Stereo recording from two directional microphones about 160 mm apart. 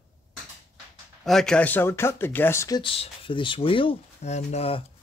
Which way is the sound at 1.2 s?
5° left (ahead or behind).